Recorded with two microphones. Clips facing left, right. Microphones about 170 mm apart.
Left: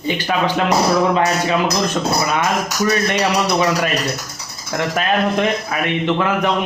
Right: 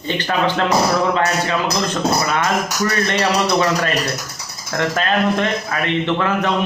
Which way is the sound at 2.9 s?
10° left (ahead or behind).